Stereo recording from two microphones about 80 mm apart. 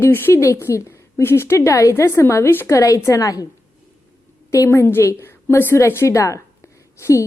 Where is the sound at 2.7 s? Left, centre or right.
Left.